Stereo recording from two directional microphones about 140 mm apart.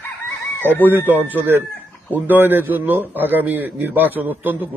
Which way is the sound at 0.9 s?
15° right (ahead or behind).